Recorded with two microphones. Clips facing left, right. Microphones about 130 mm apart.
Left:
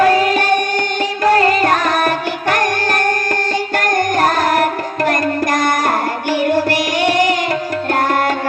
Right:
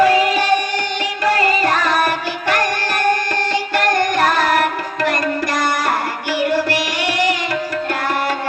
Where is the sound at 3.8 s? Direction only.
45° left (ahead or behind).